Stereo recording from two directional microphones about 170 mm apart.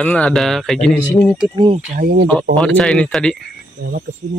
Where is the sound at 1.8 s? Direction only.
55° right (ahead or behind).